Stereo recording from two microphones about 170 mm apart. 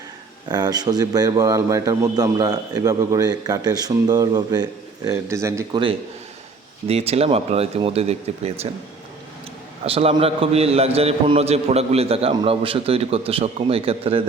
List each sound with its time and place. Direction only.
0.4 s a man's voice: 25° right (ahead or behind)
6.8 s a man's voice: 35° right (ahead or behind)
9.8 s a man's voice: 35° right (ahead or behind)